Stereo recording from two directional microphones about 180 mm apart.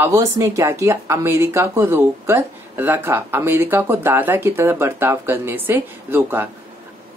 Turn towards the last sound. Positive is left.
turn(degrees=-10)  # may be behind; listen again after turning